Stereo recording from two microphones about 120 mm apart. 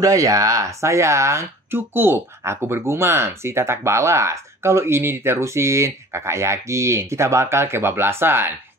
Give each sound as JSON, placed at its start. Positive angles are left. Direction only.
{"t": 0.0, "sound": "speech", "side_deg": -30}